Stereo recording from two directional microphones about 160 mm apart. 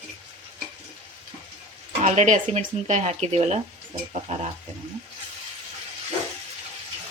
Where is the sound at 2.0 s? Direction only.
45° right (ahead or behind).